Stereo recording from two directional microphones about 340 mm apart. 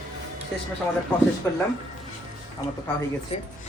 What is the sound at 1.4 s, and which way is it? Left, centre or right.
Speech, centre.